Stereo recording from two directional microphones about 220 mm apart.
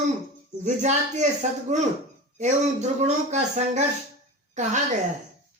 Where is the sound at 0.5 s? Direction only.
35° right (ahead or behind).